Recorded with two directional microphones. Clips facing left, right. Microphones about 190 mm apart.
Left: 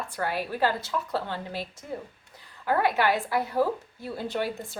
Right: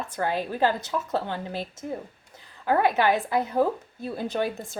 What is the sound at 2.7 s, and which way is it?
A woman's voice, 20° right (ahead or behind).